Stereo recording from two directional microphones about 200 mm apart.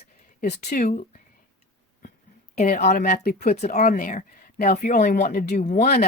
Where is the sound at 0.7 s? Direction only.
40° left (ahead or behind).